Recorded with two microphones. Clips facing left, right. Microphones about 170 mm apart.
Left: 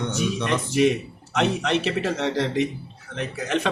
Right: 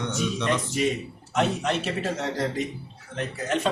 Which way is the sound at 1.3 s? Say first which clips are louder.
Left 2 dB; 80° left.